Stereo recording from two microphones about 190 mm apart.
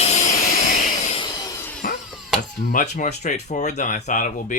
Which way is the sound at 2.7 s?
40° left (ahead or behind).